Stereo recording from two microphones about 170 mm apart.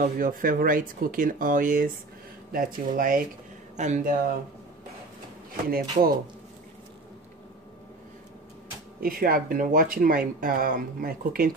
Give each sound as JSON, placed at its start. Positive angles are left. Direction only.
{"t": 0.0, "sound": "speech", "side_deg": -55}
{"t": 5.7, "sound": "speech", "side_deg": -60}
{"t": 9.0, "sound": "speech", "side_deg": -55}